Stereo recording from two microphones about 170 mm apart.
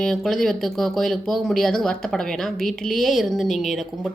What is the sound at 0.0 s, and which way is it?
A woman's voice, 5° left (ahead or behind).